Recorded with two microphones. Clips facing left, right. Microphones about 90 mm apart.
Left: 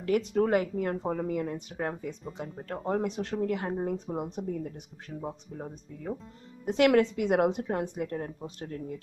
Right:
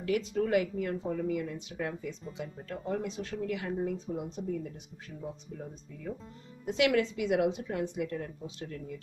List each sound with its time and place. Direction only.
0.2 s speech: 60° left (ahead or behind)
0.5 s speech: 45° left (ahead or behind)
2.8 s speech: 55° left (ahead or behind)
3.3 s speech: 45° left (ahead or behind)
3.9 s a woman's voice: 55° left (ahead or behind); by 8.9 s 35° left (ahead or behind)